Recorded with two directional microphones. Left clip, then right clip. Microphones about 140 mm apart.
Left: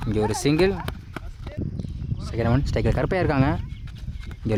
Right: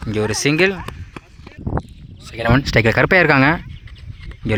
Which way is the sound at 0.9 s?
20° left (ahead or behind).